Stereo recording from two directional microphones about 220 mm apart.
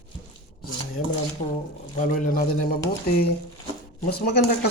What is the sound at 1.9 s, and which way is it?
A man's voice, 40° left (ahead or behind).